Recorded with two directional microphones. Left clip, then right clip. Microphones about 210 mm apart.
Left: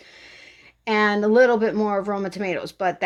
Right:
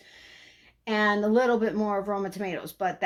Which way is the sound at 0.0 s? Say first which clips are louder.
Left 5 dB; 45° left (ahead or behind).